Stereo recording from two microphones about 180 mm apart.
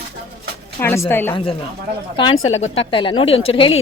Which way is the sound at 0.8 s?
15° left (ahead or behind).